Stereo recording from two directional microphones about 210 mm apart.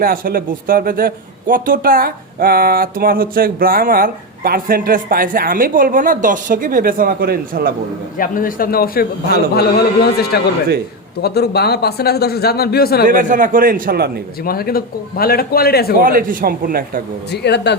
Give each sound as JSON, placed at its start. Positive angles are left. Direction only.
{"t": 0.0, "sound": "speech", "side_deg": -45}
{"t": 8.2, "sound": "a man's voice", "side_deg": 40}
{"t": 13.1, "sound": "a man's voice", "side_deg": -40}
{"t": 14.4, "sound": "a man's voice", "side_deg": 45}
{"t": 16.0, "sound": "speech", "side_deg": -40}
{"t": 17.3, "sound": "speech", "side_deg": 55}